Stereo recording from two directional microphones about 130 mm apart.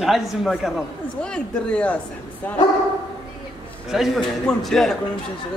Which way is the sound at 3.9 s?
Centre (ahead or behind).